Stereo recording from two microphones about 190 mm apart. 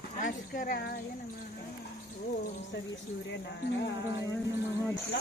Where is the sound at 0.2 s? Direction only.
45° left (ahead or behind).